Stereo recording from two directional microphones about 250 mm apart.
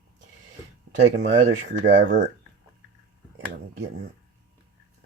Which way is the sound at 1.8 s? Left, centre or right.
Right.